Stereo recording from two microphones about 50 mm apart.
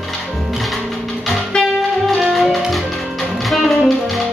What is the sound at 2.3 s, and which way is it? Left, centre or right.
Music, centre.